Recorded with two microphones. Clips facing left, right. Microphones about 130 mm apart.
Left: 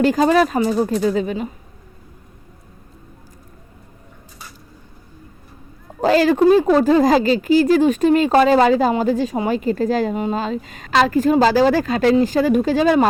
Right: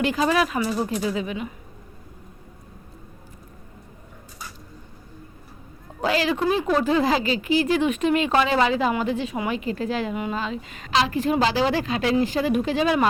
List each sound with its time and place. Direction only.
0.0 s speech: 40° left (ahead or behind)
6.0 s speech: 45° left (ahead or behind)